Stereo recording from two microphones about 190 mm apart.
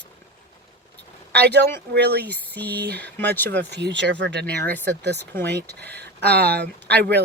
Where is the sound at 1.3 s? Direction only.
60° right (ahead or behind).